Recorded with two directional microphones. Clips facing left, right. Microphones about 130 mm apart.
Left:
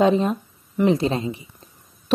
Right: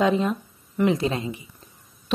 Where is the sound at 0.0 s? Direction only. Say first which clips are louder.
Left 3 dB; 30° left (ahead or behind).